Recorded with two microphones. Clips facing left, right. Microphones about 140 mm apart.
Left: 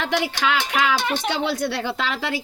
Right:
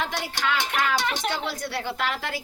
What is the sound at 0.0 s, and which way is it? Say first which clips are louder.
Speech: left 6 dB; 90° left.